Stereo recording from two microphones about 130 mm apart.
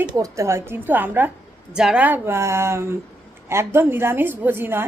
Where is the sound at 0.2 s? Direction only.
20° right (ahead or behind).